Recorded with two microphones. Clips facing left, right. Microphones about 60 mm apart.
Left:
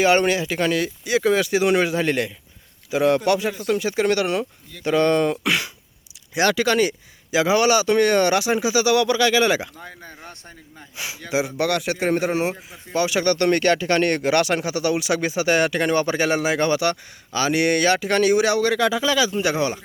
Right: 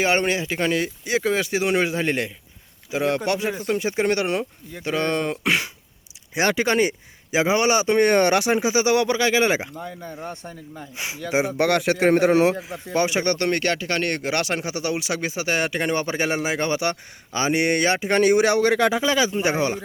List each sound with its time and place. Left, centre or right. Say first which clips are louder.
0.0 s speech: left 3 dB; centre
4.9 s speech: left 5 dB; centre
5.4 s speech: even; right
8.7 s speech: left 4 dB; right
10.9 s a man's voice: right 1 dB; right
12.9 s speech: even; right
13.1 s speech: left 3 dB; right
13.5 s speech: left 5 dB; centre
14.3 s speech: left 5 dB; centre
17.3 s speech: left 1 dB; right